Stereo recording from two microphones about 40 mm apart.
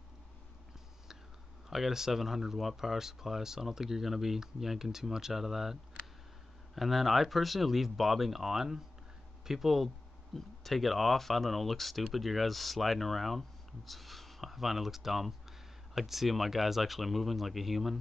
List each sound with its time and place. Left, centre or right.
1.7 s speech: centre